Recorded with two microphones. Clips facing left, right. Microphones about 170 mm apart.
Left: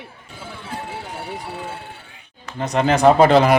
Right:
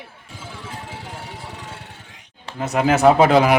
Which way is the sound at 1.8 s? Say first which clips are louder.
Left 3 dB; 80° right.